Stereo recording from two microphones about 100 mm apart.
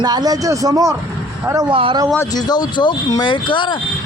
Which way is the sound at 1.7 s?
65° right (ahead or behind).